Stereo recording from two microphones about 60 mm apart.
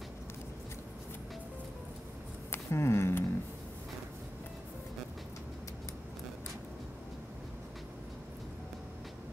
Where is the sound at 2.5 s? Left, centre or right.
Left.